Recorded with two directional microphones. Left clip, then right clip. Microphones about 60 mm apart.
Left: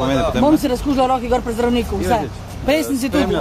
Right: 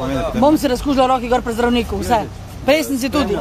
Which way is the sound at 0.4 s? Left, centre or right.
Right.